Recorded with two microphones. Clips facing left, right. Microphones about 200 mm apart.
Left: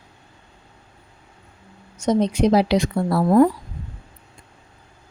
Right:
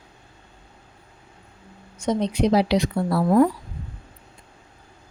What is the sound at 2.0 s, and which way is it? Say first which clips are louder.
A woman's voice: left 3 dB; 45° left (ahead or behind).